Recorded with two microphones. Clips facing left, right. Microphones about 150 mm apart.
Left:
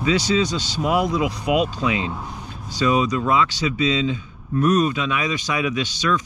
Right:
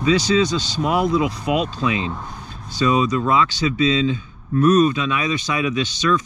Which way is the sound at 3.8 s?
20° left (ahead or behind).